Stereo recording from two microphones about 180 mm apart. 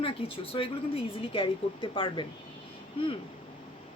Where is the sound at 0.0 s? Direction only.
30° left (ahead or behind).